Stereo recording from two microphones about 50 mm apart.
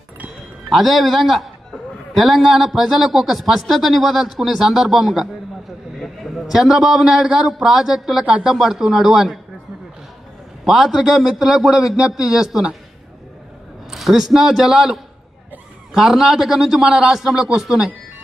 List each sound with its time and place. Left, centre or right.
0.7 s a man's voice: centre
10.6 s a man's voice: centre
13.8 s a man's voice: centre